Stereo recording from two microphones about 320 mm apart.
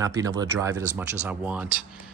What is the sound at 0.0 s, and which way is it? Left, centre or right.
Speech, centre.